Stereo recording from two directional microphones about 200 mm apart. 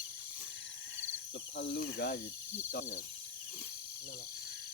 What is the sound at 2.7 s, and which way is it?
Owl, 40° left (ahead or behind).